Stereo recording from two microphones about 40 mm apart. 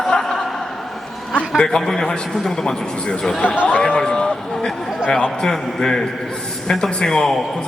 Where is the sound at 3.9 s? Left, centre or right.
Left.